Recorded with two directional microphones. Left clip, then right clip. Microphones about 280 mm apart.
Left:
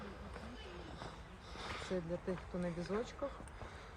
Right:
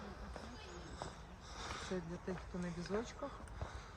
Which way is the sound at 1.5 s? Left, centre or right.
Centre.